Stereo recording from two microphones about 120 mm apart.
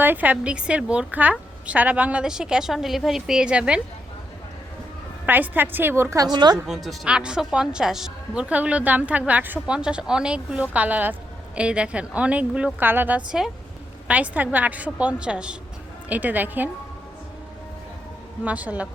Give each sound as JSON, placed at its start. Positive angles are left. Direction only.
{"t": 0.0, "sound": "a woman's voice", "side_deg": -15}
{"t": 5.2, "sound": "a woman's voice", "side_deg": -15}
{"t": 6.3, "sound": "speech", "side_deg": -35}
{"t": 6.7, "sound": "a woman's voice", "side_deg": -5}
{"t": 18.4, "sound": "a woman's voice", "side_deg": -10}